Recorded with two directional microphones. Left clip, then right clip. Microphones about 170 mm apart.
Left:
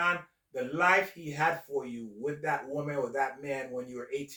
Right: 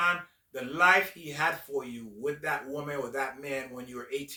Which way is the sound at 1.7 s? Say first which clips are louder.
Even; 40° right (ahead or behind).